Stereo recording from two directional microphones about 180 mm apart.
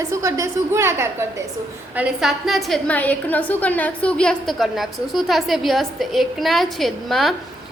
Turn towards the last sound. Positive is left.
turn(degrees=0)  # may be behind; listen again after turning